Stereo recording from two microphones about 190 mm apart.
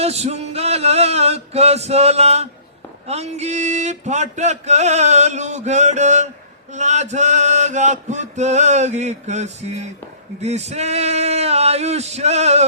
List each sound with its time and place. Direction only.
0.0 s mantra: 35° right (ahead or behind)